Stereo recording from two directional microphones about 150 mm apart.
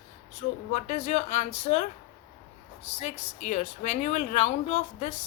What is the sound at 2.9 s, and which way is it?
Speech, 50° left (ahead or behind).